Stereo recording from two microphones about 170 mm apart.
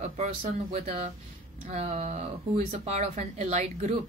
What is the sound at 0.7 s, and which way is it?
A woman's voice, 45° right (ahead or behind).